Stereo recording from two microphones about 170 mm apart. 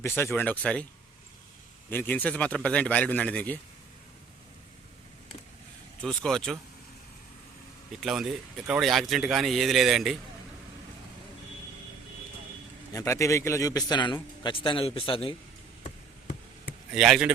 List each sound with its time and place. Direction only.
0.0 s a man's voice: 15° left (ahead or behind)
1.9 s a man's voice: 10° left (ahead or behind)
6.0 s a man's voice: 5° left (ahead or behind)
8.0 s a man's voice: centre (ahead or behind)
12.9 s a man's voice: 20° left (ahead or behind)
16.6 s a sound: 5° right (ahead or behind)